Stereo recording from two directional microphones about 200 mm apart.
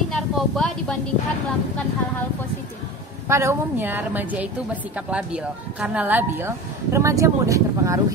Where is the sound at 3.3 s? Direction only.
15° right (ahead or behind).